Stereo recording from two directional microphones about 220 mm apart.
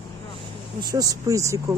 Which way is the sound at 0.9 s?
15° right (ahead or behind).